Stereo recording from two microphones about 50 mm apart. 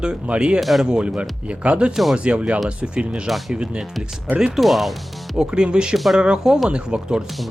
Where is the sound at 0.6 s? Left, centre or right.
Centre.